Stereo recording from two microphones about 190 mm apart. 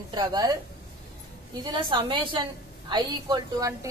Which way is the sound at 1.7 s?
25° right (ahead or behind).